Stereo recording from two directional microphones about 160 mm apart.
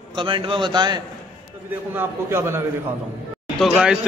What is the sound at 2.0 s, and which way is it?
Speech, 15° right (ahead or behind).